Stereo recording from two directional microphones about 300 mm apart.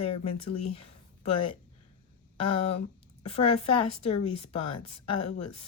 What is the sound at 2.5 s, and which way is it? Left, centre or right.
A woman's voice, centre.